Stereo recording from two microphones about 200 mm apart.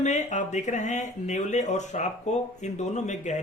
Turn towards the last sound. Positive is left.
turn(degrees=35)  # may be behind; listen again after turning